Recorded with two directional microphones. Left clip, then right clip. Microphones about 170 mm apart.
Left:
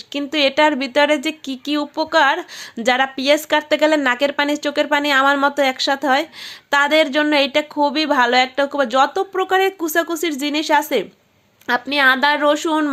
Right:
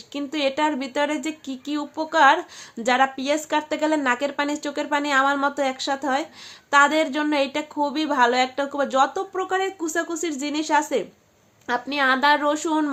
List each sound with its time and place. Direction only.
0.1 s speech: 30° left (ahead or behind)